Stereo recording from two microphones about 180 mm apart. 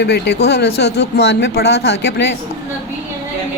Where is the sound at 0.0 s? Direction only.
70° left (ahead or behind).